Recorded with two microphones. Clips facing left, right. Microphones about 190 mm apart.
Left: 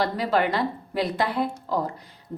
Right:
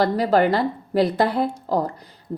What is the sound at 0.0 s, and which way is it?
A woman's voice, 40° right (ahead or behind).